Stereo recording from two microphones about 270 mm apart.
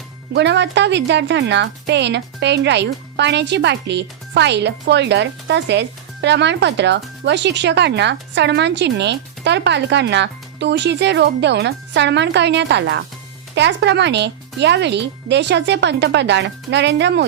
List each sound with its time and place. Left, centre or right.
0.3 s speech: right